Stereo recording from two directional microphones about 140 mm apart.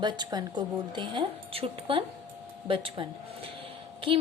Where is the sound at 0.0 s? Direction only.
30° right (ahead or behind).